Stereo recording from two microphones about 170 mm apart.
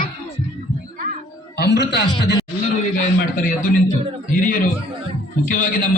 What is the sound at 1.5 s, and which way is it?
Speech, 80° left.